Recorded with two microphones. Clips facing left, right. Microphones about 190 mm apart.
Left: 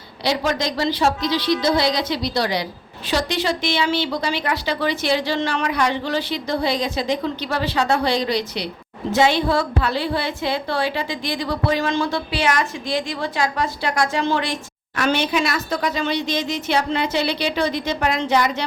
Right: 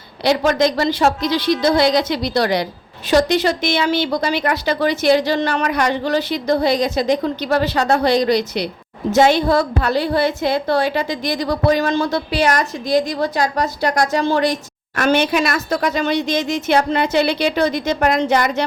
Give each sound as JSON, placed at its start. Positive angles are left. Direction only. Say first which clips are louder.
{"t": 0.3, "sound": "a woman's voice", "louder": "right 6 dB", "side_deg": -55}